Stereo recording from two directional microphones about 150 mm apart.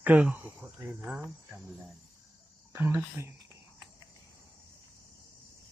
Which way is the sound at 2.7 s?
15° right (ahead or behind).